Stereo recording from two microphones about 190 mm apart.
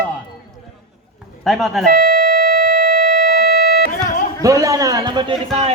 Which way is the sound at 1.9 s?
50° right (ahead or behind).